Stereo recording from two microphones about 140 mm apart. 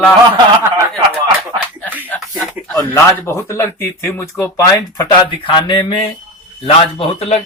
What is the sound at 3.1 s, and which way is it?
Speech, 15° left (ahead or behind).